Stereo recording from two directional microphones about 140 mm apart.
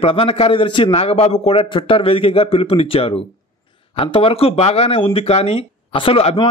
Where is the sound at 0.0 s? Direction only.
40° left (ahead or behind).